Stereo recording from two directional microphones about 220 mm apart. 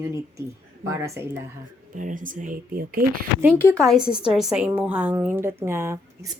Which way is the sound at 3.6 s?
5° left (ahead or behind).